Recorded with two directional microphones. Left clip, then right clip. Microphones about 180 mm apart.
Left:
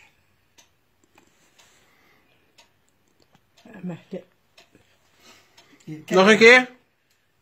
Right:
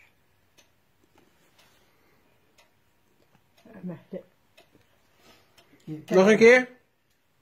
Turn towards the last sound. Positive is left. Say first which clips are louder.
# left 4 dB
turn(degrees=0)  # may be behind; listen again after turning